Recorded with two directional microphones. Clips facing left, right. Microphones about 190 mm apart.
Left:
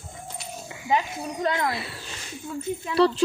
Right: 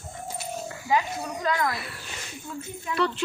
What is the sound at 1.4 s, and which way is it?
Speech, 30° left (ahead or behind).